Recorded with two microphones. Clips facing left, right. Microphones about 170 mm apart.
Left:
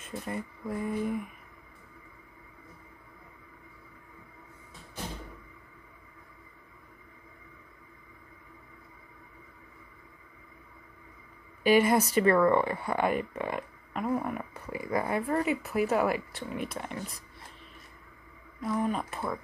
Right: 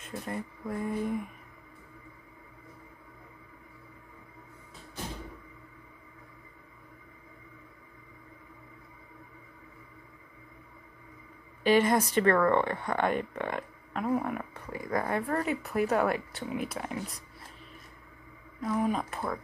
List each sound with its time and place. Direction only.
0.0 s a sound: centre (ahead or behind)
11.6 s speech: 10° left (ahead or behind)
18.6 s speech: 5° right (ahead or behind)